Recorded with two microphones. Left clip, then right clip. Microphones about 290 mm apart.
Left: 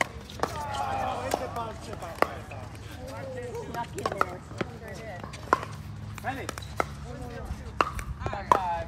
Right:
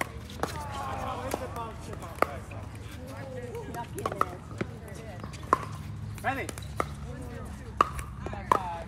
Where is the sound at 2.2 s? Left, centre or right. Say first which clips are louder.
Left 1 dB; left.